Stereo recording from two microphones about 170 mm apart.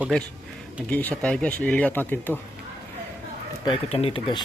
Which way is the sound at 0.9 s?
10° left (ahead or behind).